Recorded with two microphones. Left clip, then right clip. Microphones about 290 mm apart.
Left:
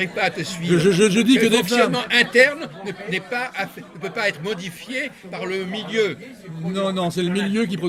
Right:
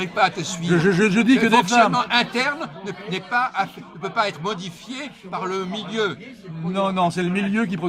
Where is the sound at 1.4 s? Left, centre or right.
Left.